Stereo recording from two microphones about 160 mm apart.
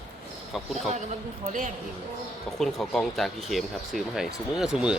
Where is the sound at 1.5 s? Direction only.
55° right (ahead or behind).